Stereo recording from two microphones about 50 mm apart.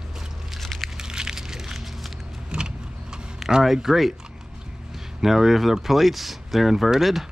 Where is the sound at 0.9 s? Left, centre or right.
Centre.